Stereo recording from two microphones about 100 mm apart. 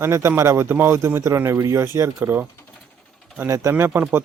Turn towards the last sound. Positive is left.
turn(degrees=-25)  # may be behind; listen again after turning